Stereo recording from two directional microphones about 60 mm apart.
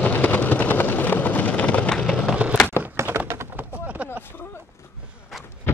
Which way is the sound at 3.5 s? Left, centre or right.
Right.